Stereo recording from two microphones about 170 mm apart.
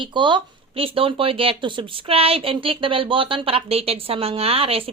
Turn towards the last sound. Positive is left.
turn(degrees=-35)  # may be behind; listen again after turning